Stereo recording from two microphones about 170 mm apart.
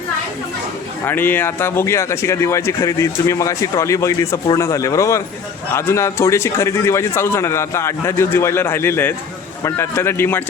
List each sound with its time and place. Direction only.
1.0 s a man's voice: 10° left (ahead or behind)